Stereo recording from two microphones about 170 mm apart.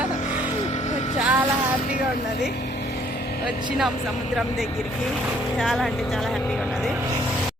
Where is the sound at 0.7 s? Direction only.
40° left (ahead or behind).